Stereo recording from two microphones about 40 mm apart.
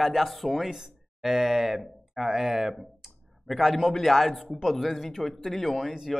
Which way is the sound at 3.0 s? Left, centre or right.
Centre.